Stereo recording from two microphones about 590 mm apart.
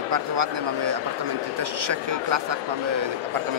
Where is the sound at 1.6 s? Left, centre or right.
Right.